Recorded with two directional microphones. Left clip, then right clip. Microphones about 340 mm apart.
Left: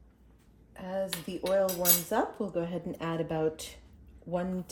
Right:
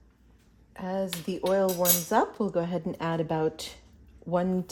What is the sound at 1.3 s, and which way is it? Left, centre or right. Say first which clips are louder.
Speech: right 3 dB; right.